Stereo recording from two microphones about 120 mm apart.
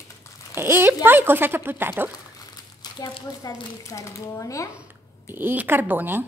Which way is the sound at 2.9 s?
35° left (ahead or behind).